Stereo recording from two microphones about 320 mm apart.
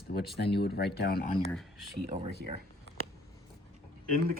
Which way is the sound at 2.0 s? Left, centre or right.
Right.